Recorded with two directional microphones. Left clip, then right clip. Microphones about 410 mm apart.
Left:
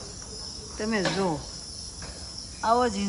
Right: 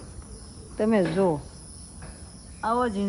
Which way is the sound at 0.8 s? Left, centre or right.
Centre.